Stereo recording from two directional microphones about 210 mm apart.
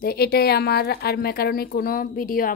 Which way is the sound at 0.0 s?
45° left (ahead or behind).